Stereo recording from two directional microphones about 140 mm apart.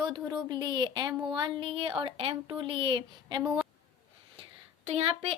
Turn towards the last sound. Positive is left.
turn(degrees=-45)  # may be behind; listen again after turning